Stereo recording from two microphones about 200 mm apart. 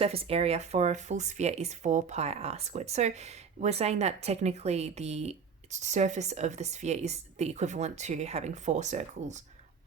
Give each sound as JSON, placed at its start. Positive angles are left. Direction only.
{"t": 0.0, "sound": "speech", "side_deg": -30}